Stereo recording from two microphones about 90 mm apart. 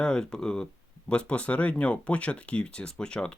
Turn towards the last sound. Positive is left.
turn(degrees=10)  # may be behind; listen again after turning